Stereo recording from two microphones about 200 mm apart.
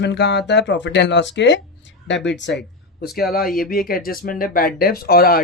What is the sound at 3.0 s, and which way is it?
Speech, 50° left (ahead or behind).